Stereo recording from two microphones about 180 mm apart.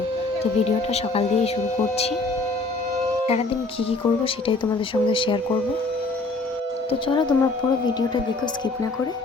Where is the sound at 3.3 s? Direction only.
35° left (ahead or behind).